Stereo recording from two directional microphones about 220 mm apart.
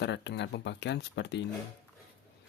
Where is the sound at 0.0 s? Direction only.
50° left (ahead or behind).